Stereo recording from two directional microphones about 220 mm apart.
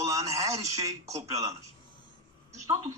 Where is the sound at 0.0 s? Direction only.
15° right (ahead or behind).